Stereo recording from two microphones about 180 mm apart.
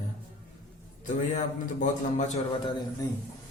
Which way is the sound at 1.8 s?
40° left (ahead or behind).